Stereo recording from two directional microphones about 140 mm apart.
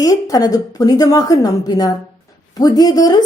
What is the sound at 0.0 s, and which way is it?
A woman's voice, 25° left (ahead or behind).